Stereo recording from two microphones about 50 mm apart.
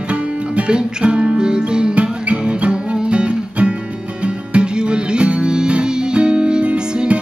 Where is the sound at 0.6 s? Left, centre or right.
Centre.